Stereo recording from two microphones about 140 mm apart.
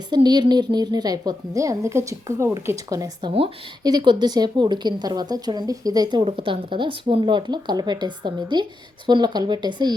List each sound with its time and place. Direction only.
0.1 s a woman's voice: 30° right (ahead or behind)